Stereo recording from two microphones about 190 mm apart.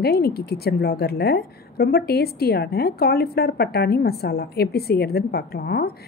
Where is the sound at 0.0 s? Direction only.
55° left (ahead or behind).